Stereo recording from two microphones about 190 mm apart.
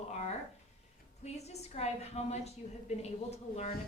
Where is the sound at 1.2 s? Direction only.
35° left (ahead or behind).